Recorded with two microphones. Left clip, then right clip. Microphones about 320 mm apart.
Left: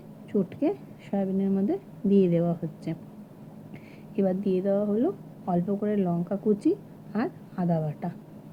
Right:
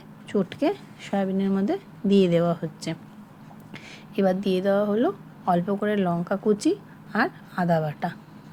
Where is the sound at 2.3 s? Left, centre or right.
Centre.